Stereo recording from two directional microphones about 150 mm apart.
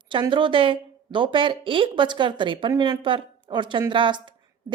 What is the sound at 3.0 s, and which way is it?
A woman's voice, 35° right (ahead or behind).